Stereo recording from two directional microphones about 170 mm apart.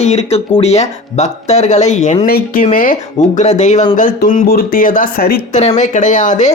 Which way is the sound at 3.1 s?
40° left (ahead or behind).